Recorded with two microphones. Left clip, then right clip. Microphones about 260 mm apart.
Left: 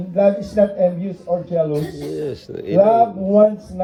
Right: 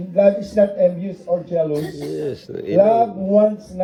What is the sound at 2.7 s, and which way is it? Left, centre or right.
Speech, left.